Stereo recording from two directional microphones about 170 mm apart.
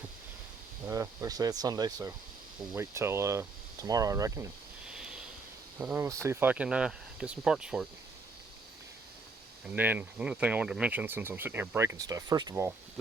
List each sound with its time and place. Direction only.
0.9 s speech: 20° right (ahead or behind)
4.9 s a sound: 5° right (ahead or behind)
6.0 s speech: 15° right (ahead or behind)
9.6 s speech: 10° right (ahead or behind)